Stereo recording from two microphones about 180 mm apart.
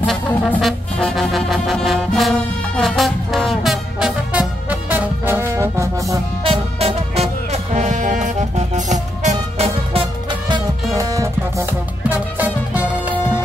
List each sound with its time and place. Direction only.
0.0 s music: 5° left (ahead or behind); by 6.1 s 15° right (ahead or behind)
6.4 s music: 30° right (ahead or behind)
10.5 s music: 20° right (ahead or behind)